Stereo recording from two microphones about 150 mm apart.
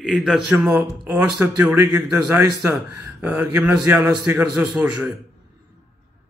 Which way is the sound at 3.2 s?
10° right (ahead or behind).